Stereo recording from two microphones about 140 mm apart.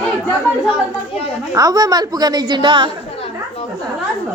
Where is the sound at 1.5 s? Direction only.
25° right (ahead or behind).